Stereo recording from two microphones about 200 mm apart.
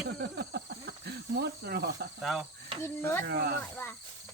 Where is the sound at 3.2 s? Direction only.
50° right (ahead or behind).